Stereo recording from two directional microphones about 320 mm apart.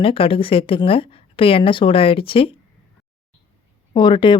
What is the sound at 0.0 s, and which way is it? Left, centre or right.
Speech, centre.